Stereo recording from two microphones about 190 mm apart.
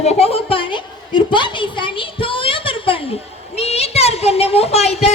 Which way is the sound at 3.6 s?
35° left (ahead or behind).